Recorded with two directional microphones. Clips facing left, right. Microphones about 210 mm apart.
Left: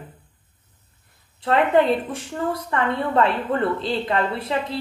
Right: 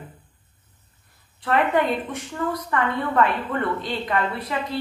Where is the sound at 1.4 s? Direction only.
25° left (ahead or behind).